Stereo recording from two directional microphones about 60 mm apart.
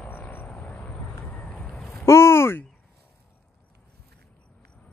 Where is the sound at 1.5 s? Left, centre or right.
Centre.